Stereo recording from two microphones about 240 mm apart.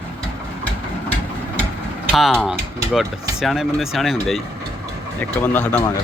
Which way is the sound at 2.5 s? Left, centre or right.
Centre.